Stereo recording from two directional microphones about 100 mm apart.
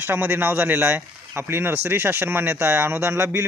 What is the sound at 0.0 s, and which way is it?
Speech, 20° right (ahead or behind).